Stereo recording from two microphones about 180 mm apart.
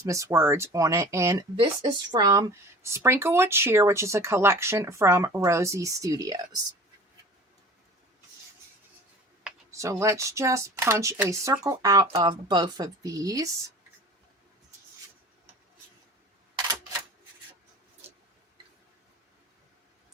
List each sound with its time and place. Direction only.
0.0 s speech: 15° right (ahead or behind)
9.7 s speech: 15° right (ahead or behind)
16.6 s camera: 20° right (ahead or behind)